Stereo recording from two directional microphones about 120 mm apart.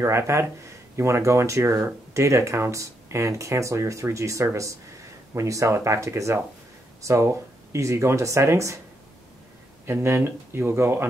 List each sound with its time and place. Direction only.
0.0 s speech: 20° right (ahead or behind)
9.8 s speech: 20° right (ahead or behind)